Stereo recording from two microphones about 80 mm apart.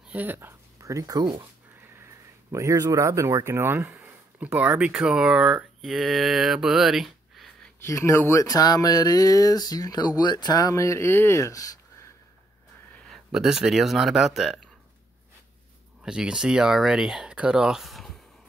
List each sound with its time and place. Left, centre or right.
0.0 s a sound: centre
0.8 s speech: right
2.0 s a sound: right
4.5 s speech: centre
7.8 s speech: left
13.3 s speech: centre
16.0 s speech: centre